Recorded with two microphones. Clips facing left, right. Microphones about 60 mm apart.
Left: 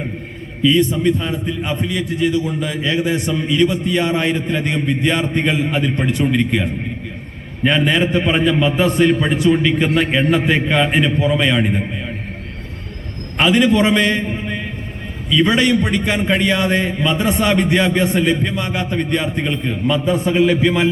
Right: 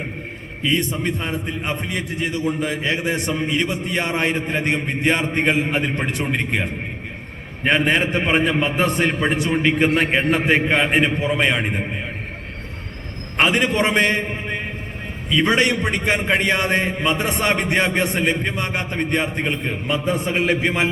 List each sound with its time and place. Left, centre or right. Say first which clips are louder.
0.7 s a man's voice: left 6 dB; right
13.3 s a man's voice: left 4 dB; right